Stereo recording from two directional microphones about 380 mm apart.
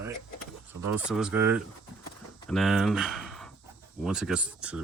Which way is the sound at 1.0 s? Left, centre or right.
Centre.